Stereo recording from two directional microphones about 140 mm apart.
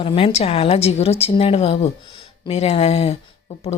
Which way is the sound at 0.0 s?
40° left (ahead or behind).